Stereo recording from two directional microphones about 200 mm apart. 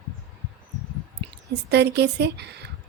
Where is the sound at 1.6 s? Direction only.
55° right (ahead or behind).